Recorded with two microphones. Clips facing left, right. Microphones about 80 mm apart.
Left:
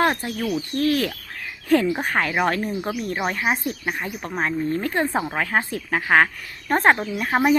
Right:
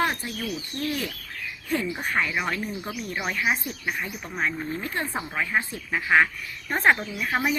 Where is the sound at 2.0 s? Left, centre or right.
Left.